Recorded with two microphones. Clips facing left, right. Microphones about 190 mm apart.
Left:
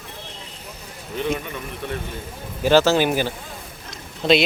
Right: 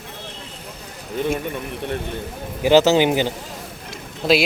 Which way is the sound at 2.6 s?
15° right (ahead or behind).